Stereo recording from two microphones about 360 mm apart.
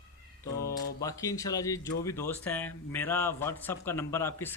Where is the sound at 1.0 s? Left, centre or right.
Centre.